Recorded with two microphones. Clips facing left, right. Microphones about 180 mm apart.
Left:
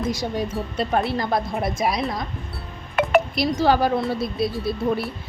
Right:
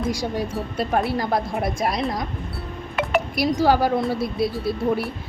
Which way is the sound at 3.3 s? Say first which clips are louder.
Right 1 dB; 10° right (ahead or behind).